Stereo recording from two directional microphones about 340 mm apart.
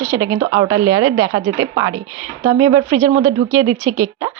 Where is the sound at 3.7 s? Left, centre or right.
Right.